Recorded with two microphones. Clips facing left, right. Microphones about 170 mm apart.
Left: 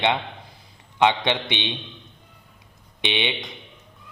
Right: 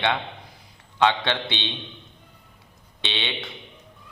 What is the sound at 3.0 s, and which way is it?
Speech, 15° left (ahead or behind).